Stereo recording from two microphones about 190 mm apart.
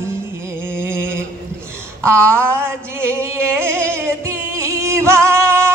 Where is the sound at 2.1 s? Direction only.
5° left (ahead or behind).